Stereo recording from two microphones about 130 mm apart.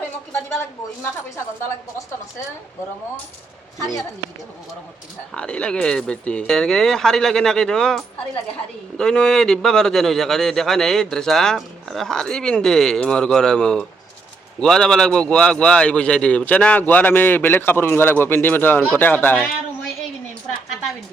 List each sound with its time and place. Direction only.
3.8 s a woman's voice: 25° left (ahead or behind)
5.3 s a man's voice: 10° left (ahead or behind)